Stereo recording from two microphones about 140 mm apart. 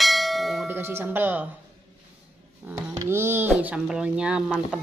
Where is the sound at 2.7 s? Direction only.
20° right (ahead or behind).